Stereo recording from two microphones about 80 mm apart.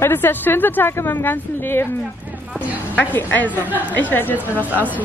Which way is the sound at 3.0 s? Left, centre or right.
Left.